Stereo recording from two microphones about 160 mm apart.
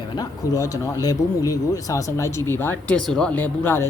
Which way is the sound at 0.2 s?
20° left (ahead or behind).